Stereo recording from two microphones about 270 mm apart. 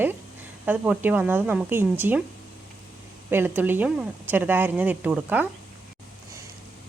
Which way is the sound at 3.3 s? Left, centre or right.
Centre.